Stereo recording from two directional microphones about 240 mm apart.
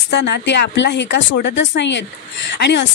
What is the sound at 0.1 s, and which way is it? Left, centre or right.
A woman's voice, left.